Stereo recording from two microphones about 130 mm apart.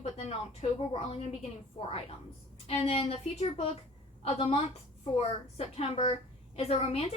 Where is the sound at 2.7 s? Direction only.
50° left (ahead or behind).